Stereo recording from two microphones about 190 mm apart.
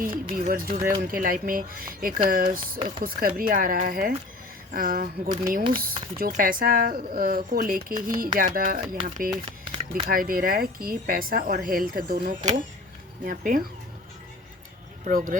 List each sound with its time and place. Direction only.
0.3 s speech: 50° right (ahead or behind)
15.0 s speech: 45° right (ahead or behind)